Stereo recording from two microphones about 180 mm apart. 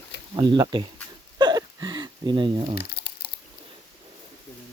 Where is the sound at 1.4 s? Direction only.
25° right (ahead or behind).